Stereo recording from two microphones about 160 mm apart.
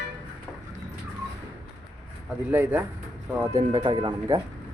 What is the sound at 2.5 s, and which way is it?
Speech, 10° right (ahead or behind).